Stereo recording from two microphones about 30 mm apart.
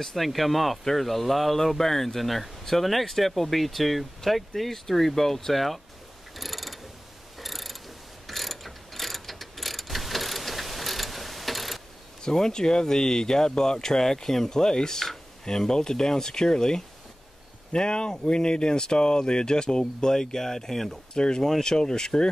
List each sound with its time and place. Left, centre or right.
0.1 s speech: centre
6.3 s mechanisms: centre
8.3 s ratchet: centre
12.2 s speech: left
21.1 s speech: left